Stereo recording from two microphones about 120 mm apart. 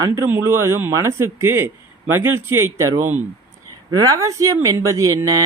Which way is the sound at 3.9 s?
25° right (ahead or behind).